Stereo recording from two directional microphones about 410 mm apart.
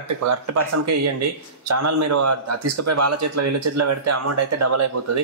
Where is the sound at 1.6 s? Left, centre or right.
Right.